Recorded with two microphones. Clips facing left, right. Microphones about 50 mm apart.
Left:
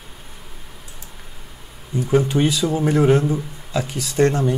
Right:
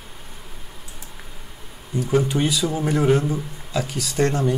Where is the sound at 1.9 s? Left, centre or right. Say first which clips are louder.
Left 2 dB; centre.